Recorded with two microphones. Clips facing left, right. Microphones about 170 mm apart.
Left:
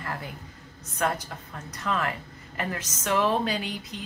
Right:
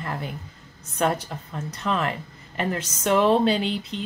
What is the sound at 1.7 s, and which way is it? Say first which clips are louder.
A woman's voice: right 3 dB; 25° right (ahead or behind).